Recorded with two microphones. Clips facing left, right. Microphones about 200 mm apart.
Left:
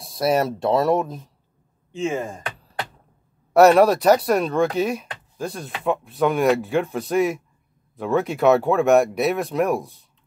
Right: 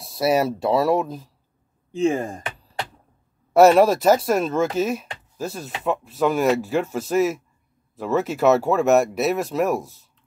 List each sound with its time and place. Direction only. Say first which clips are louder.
0.0 s speech: even; centre (ahead or behind)
1.9 s speech: right 4 dB; 40° right (ahead or behind)
3.5 s speech: even; centre (ahead or behind)